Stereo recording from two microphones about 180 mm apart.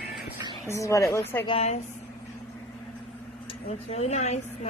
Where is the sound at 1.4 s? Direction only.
35° left (ahead or behind).